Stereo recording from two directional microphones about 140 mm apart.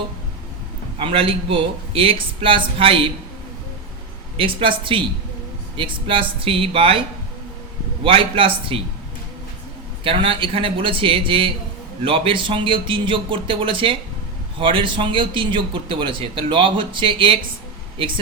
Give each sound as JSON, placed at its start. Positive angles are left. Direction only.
{"t": 0.9, "sound": "a man's voice", "side_deg": -40}
{"t": 4.4, "sound": "a man's voice", "side_deg": -40}
{"t": 8.0, "sound": "a man's voice", "side_deg": -40}
{"t": 10.0, "sound": "a man's voice", "side_deg": -40}